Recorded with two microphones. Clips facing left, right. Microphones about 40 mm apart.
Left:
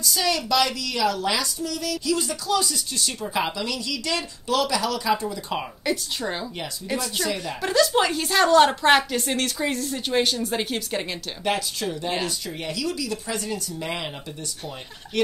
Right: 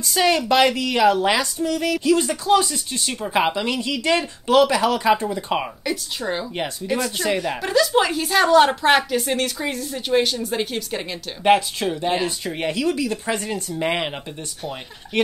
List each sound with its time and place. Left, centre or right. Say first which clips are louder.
0.0 s speech: right 6 dB; right
5.9 s speech: right 1 dB; centre
6.8 s speech: right 3 dB; right
7.3 s speech: right 1 dB; centre
11.4 s speech: right 9 dB; right
15.1 s speech: right 2 dB; right